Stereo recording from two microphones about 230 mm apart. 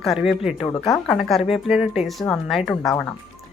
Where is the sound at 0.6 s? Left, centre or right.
Centre.